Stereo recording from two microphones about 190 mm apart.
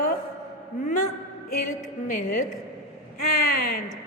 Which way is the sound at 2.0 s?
45° left (ahead or behind).